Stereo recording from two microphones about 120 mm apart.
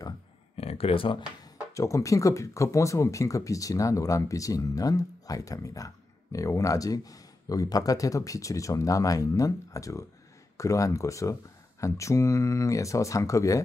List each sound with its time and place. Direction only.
0.6 s speech: 55° left (ahead or behind)
1.7 s speech: 25° left (ahead or behind)